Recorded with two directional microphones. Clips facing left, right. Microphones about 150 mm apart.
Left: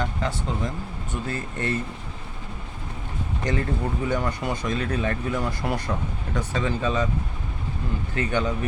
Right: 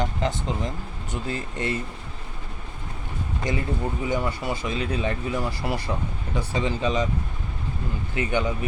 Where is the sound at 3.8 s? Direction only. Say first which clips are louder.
Right 1 dB; 5° right (ahead or behind).